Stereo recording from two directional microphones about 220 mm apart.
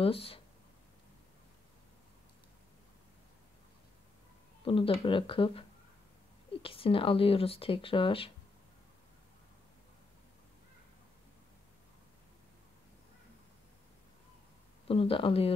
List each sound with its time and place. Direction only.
0.0 s speech: 25° left (ahead or behind)
4.6 s speech: 25° left (ahead or behind)
14.9 s speech: 25° left (ahead or behind)